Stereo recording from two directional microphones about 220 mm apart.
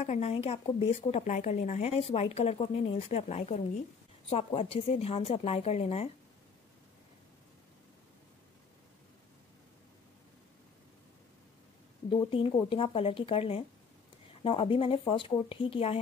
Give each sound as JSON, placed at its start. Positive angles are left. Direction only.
{"t": 0.0, "sound": "a woman's voice", "side_deg": 30}
{"t": 12.3, "sound": "a woman's voice", "side_deg": 25}